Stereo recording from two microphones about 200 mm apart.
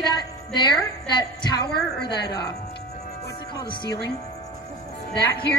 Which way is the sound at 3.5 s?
25° left (ahead or behind).